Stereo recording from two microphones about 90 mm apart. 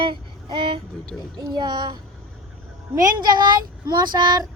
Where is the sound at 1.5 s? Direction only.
55° right (ahead or behind).